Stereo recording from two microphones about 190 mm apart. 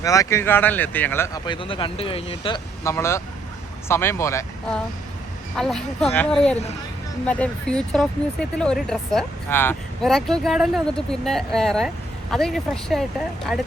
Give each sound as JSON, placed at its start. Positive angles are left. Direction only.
{"t": 0.0, "sound": "speech", "side_deg": 15}
{"t": 2.8, "sound": "speech", "side_deg": 15}
{"t": 5.5, "sound": "speech", "side_deg": 5}